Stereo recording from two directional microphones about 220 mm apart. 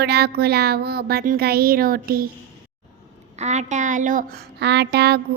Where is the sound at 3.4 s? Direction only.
30° right (ahead or behind).